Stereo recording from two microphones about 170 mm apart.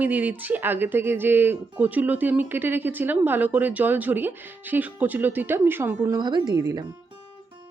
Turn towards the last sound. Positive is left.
turn(degrees=-20)  # may be behind; listen again after turning